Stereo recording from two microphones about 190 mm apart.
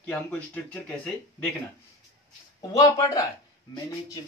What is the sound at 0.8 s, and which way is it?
Speech, 5° left (ahead or behind).